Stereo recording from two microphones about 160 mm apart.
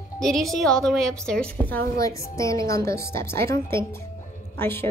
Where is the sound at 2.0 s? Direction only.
20° left (ahead or behind).